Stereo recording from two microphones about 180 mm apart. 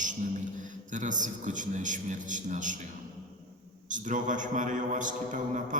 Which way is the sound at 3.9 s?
45° right (ahead or behind).